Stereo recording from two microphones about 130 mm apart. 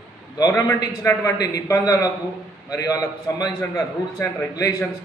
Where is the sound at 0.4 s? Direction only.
25° left (ahead or behind).